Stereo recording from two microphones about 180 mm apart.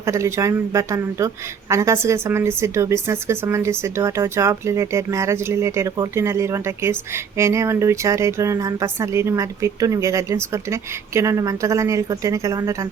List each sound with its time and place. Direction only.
0.0 s a woman's voice: 15° right (ahead or behind)